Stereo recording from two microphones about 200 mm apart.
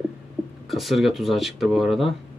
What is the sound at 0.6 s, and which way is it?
Speech, centre (ahead or behind).